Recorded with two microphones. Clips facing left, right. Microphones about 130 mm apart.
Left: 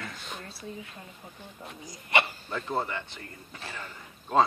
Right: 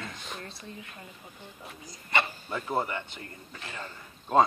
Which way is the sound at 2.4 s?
10° right (ahead or behind).